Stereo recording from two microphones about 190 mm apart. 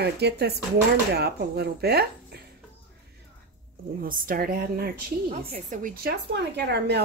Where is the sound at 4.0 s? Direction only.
50° right (ahead or behind).